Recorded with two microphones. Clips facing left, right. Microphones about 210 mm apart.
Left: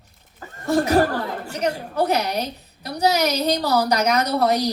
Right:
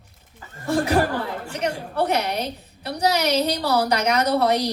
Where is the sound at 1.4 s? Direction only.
40° left (ahead or behind).